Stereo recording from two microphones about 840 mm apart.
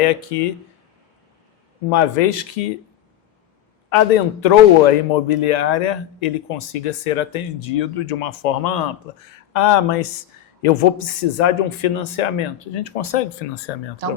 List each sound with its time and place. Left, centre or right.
0.0 s speech: left
1.9 s speech: left
4.4 s speech: left